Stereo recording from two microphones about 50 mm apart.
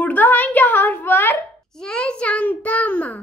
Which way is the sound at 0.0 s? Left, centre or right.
Left.